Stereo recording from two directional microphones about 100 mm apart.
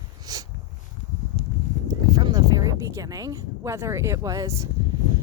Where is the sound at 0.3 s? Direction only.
40° right (ahead or behind).